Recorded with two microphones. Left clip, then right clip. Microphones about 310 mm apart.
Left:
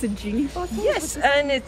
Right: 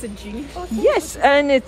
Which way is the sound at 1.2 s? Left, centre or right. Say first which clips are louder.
Right 5 dB; centre.